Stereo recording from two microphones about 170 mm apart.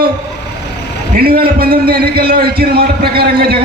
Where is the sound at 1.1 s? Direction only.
60° right (ahead or behind).